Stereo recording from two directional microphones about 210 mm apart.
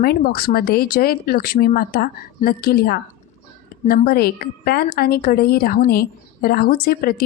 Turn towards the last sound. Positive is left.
turn(degrees=45)  # may be behind; listen again after turning